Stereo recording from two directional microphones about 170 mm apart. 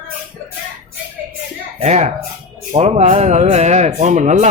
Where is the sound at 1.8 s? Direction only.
40° right (ahead or behind).